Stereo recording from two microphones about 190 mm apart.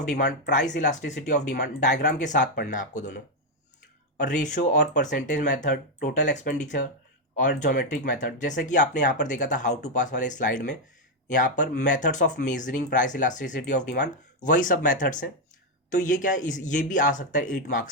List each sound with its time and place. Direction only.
0.8 s speech: 40° left (ahead or behind)
4.2 s speech: 40° left (ahead or behind)